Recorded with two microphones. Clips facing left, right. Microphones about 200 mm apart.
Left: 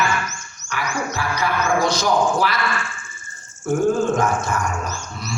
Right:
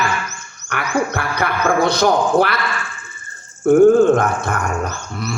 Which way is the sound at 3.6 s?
60° right (ahead or behind).